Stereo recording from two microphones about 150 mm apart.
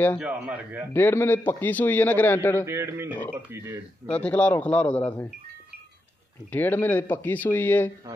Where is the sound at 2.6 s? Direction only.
15° right (ahead or behind).